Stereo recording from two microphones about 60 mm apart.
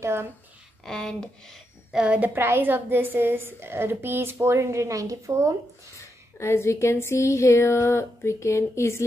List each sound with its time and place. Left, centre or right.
0.0 s a woman's voice: right
0.8 s speech: centre
1.9 s a woman's voice: centre
2.2 s a woman's voice: right
6.4 s speech: left